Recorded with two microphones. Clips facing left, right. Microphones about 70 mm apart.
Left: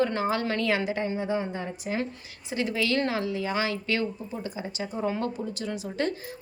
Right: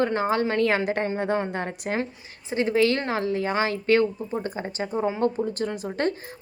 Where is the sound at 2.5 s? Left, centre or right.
Right.